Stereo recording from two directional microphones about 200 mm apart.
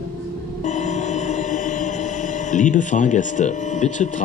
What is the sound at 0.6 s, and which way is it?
Music, 35° left (ahead or behind).